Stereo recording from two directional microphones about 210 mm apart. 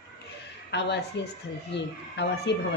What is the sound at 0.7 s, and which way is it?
A woman's voice, 55° left (ahead or behind).